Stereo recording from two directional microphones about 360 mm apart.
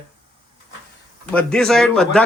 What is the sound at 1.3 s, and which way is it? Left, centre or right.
Speech, centre.